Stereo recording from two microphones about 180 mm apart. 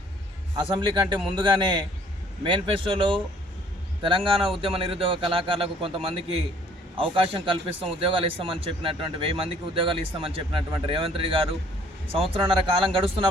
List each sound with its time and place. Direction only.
0.5 s a man's voice: 25° right (ahead or behind)